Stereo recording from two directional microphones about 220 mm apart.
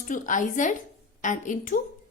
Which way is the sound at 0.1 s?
35° left (ahead or behind).